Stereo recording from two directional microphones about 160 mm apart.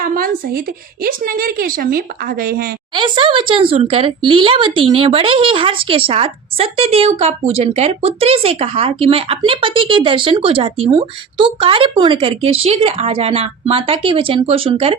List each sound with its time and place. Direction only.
0.0 s a sound: 65° right (ahead or behind)
1.0 s a woman's voice: 65° right (ahead or behind)
2.9 s speech: 30° right (ahead or behind)